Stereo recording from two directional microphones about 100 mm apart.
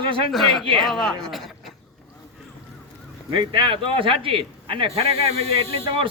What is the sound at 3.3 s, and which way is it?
Speech, 55° right (ahead or behind).